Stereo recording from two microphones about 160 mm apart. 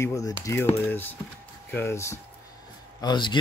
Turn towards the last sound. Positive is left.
turn(degrees=30)  # may be behind; listen again after turning